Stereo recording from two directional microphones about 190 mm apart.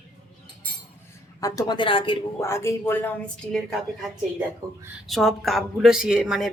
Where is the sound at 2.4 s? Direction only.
15° left (ahead or behind).